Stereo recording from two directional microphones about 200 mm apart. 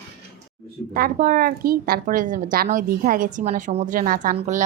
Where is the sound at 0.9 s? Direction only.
45° right (ahead or behind).